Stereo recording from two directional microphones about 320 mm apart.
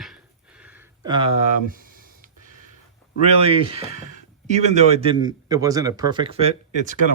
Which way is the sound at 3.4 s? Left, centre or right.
Centre.